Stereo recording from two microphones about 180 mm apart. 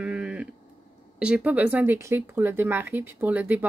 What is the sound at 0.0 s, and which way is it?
Sheep, 5° right (ahead or behind).